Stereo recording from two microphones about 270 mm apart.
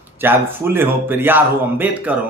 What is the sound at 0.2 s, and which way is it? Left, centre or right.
A man's voice, centre.